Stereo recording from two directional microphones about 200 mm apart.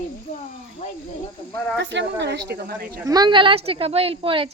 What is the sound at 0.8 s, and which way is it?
Speech, 40° left (ahead or behind).